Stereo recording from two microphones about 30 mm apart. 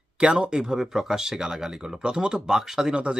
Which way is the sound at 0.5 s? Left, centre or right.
Right.